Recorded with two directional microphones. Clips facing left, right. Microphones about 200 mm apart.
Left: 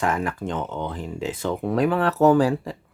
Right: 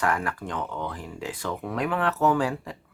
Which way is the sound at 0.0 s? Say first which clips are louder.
Left 3 dB; 20° left (ahead or behind).